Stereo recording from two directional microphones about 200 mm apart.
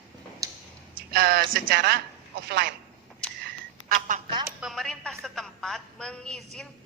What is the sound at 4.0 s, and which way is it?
Speech, 40° right (ahead or behind).